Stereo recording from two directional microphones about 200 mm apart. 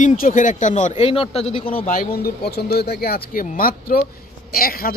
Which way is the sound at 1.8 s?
45° left (ahead or behind).